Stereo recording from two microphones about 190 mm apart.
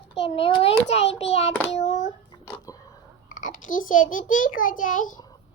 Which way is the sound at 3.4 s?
45° left (ahead or behind).